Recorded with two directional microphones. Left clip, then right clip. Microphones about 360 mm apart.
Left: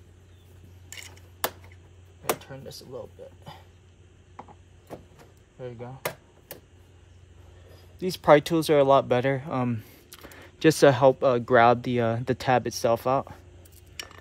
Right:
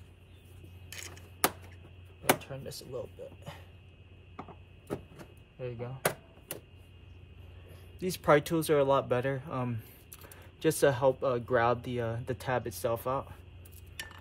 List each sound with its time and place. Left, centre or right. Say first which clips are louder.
2.4 s speech: left 1 dB; centre
8.0 s speech: left 7 dB; centre